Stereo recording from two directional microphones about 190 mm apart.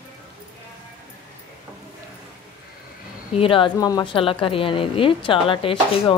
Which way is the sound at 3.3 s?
30° left (ahead or behind).